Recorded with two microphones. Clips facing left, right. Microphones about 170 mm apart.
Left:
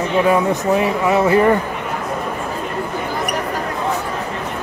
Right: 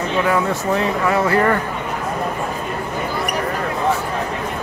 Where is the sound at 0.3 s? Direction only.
20° left (ahead or behind).